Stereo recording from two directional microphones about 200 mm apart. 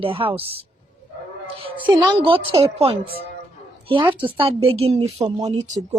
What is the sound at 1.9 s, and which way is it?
A woman's voice, 25° right (ahead or behind).